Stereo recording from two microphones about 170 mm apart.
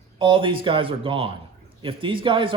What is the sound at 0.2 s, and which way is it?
Speech, 30° right (ahead or behind).